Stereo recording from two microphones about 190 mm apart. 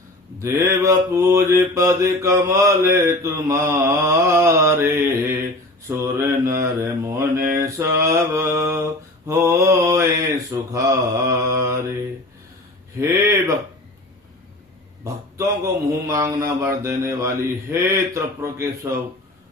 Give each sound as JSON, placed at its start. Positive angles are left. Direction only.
{"t": 0.3, "sound": "mantra", "side_deg": -15}
{"t": 13.0, "sound": "mantra", "side_deg": -15}
{"t": 15.0, "sound": "mantra", "side_deg": -15}